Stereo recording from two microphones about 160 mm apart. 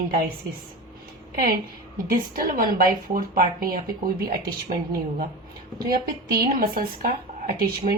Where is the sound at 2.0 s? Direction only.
65° right (ahead or behind).